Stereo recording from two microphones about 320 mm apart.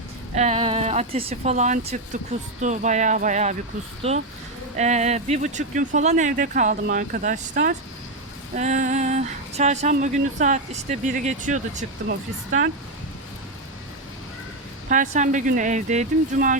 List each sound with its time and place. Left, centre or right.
0.3 s speech: centre
14.8 s speech: right